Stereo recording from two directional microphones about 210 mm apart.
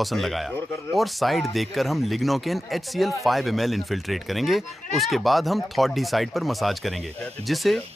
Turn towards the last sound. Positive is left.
turn(degrees=0)  # may be behind; listen again after turning